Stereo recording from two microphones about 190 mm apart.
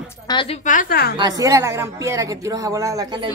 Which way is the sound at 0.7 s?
45° left (ahead or behind).